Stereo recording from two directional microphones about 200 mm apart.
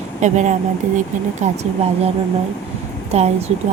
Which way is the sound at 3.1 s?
30° right (ahead or behind).